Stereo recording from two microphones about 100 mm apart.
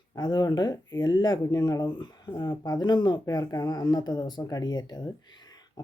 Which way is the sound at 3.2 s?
35° left (ahead or behind).